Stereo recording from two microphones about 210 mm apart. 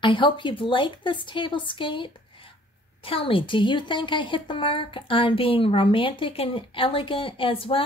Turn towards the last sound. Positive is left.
turn(degrees=25)  # may be behind; listen again after turning